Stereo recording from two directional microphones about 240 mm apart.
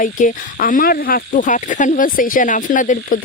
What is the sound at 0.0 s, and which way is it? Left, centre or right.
Speech, left.